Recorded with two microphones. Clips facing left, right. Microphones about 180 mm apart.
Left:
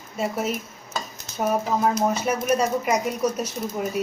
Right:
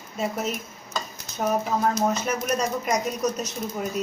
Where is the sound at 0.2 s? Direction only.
5° left (ahead or behind).